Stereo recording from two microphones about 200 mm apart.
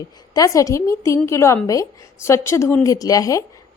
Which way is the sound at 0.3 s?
15° left (ahead or behind).